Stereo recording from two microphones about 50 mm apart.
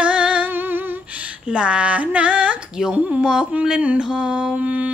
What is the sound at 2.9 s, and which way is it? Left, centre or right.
Mantra, right.